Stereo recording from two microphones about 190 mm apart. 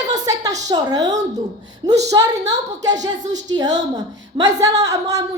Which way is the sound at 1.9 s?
20° right (ahead or behind).